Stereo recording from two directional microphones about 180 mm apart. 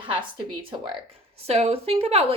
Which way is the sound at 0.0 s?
30° right (ahead or behind).